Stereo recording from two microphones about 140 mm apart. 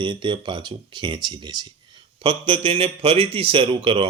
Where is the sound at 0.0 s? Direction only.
35° right (ahead or behind).